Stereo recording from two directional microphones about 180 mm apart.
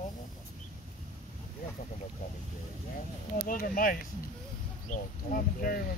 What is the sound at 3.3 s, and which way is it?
Speech, 50° left (ahead or behind).